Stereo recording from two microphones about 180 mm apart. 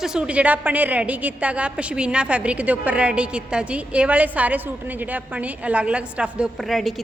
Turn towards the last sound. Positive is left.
turn(degrees=0)  # may be behind; listen again after turning